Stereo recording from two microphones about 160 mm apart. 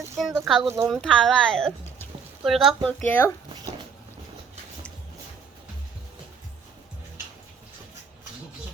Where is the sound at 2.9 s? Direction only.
10° left (ahead or behind).